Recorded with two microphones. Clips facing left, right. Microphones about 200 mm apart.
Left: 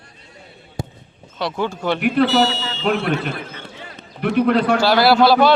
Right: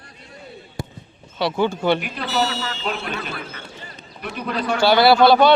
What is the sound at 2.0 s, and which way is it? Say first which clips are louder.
Speech: left 8 dB; 60° left (ahead or behind).